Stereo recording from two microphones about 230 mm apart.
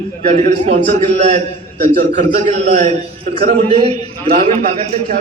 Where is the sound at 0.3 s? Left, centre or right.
Right.